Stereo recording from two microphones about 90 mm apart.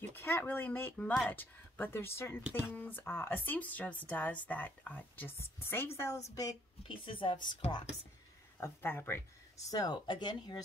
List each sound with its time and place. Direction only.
0.1 s a woman's voice: 25° left (ahead or behind)
6.8 s speech: 75° left (ahead or behind)
8.5 s speech: 25° left (ahead or behind)
9.7 s speech: 50° left (ahead or behind)